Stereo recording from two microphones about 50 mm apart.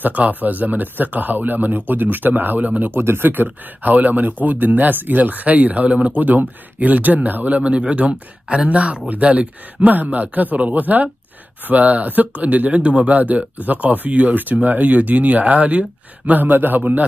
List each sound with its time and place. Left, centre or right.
0.0 s speech: right
2.9 s speech: right